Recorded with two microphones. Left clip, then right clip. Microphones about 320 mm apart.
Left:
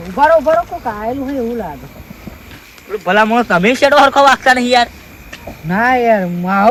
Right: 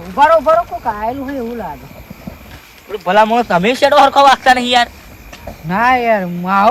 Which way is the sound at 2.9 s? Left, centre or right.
Right.